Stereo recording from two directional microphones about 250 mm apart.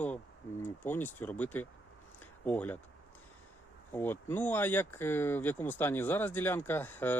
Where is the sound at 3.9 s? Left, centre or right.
Centre.